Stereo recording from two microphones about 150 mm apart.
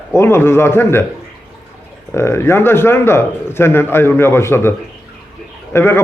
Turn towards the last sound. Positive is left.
turn(degrees=15)  # may be behind; listen again after turning